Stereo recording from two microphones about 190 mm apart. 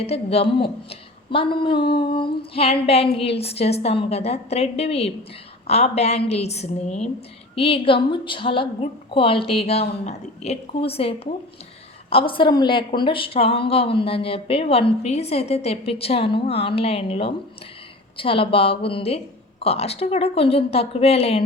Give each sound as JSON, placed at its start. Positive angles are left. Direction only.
{"t": 0.0, "sound": "a woman's voice", "side_deg": 30}